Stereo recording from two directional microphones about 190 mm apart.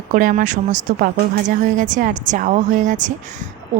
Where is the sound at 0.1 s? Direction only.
45° right (ahead or behind).